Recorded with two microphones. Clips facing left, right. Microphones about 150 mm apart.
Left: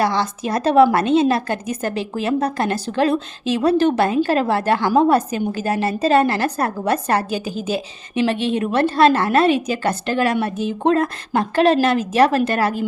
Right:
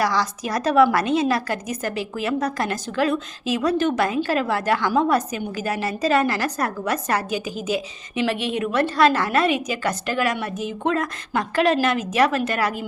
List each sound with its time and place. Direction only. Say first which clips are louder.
0.0 s a woman's voice: left 3 dB; 25° left (ahead or behind)